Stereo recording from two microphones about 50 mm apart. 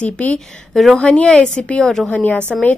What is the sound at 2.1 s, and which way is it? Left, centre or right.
Speech, left.